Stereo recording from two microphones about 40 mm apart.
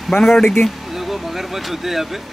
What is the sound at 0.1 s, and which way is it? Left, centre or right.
Speech, left.